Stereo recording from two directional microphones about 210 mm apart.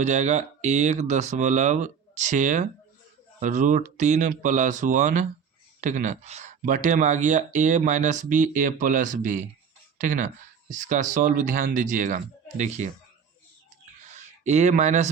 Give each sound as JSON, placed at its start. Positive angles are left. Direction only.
{"t": 0.0, "sound": "speech", "side_deg": -35}
{"t": 14.2, "sound": "speech", "side_deg": -35}